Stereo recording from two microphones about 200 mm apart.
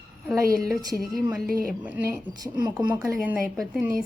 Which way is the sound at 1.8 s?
10° right (ahead or behind).